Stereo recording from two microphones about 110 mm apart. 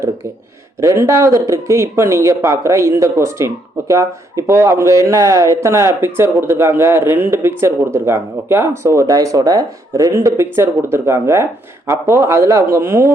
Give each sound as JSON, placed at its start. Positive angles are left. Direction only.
{"t": 0.8, "sound": "speech", "side_deg": -25}